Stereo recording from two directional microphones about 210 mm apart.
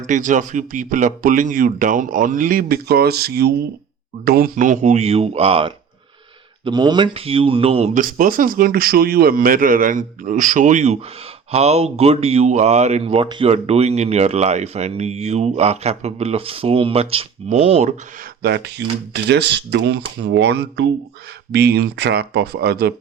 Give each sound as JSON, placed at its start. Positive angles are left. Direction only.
{"t": 0.0, "sound": "speech", "side_deg": -35}
{"t": 18.4, "sound": "speech", "side_deg": -50}